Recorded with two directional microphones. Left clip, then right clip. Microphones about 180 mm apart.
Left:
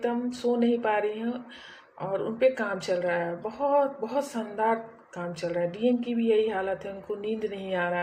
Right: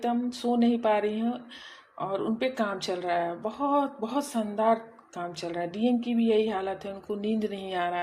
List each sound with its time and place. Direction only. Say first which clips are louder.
0.1 s speech: left 1 dB; 45° right (ahead or behind)